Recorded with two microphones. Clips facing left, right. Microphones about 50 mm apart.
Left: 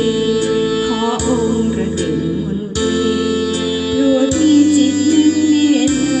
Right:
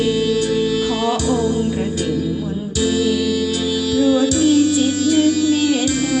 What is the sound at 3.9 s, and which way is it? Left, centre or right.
Music, left.